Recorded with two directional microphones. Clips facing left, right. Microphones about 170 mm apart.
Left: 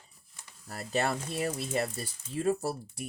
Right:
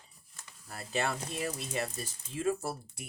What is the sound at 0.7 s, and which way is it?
Speech, 40° left (ahead or behind).